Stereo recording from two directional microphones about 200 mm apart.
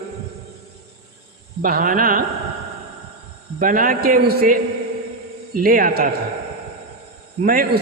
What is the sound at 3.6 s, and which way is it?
A man's voice, 45° right (ahead or behind).